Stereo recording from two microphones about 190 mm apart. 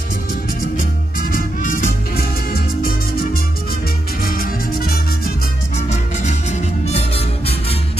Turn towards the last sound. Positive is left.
turn(degrees=30)  # may be behind; listen again after turning